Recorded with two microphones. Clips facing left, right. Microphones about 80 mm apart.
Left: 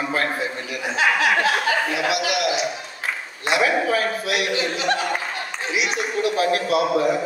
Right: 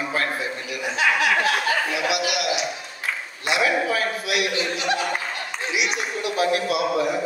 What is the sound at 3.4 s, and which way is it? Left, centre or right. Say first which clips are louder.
A man's voice: left 2 dB; left.